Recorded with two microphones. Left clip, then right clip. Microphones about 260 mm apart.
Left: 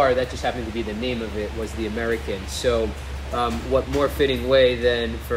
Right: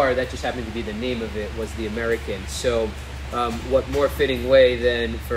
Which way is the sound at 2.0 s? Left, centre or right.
Centre.